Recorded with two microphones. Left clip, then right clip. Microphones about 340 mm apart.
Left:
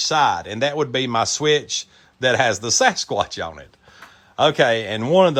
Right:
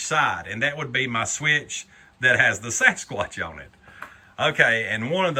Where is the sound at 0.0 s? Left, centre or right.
Centre.